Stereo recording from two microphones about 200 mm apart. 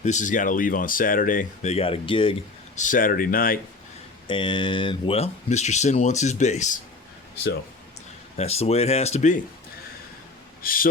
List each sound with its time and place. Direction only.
0.0 s speech: 40° left (ahead or behind)
2.7 s speech: 40° left (ahead or behind)
4.3 s speech: 25° left (ahead or behind)
8.4 s speech: 30° left (ahead or behind)
10.6 s speech: 45° left (ahead or behind)